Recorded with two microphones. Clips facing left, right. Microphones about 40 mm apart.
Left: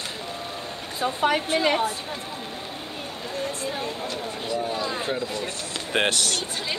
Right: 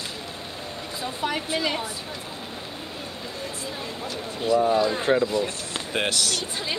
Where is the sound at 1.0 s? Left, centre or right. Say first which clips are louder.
Left 6 dB; left.